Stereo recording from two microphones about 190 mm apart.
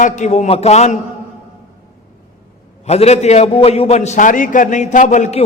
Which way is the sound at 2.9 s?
35° left (ahead or behind).